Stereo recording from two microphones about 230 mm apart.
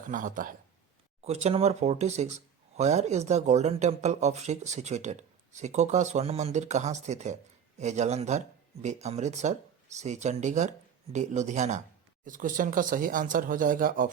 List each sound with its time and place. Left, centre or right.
0.1 s speech: right